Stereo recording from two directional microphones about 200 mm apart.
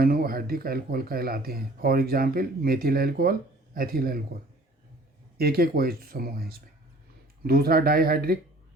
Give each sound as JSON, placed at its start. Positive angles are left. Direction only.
{"t": 0.0, "sound": "speech", "side_deg": -50}
{"t": 5.4, "sound": "speech", "side_deg": -50}